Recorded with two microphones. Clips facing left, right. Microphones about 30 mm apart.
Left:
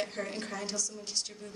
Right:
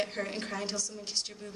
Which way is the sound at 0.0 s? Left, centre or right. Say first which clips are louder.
Right 2 dB; right.